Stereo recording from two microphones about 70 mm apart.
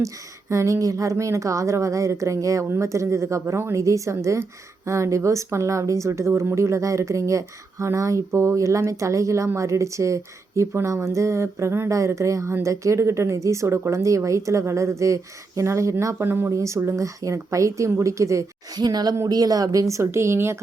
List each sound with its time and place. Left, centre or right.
0.0 s speech: right
16.2 s speech: right
16.5 s speech: right
18.8 s speech: right
19.3 s speech: right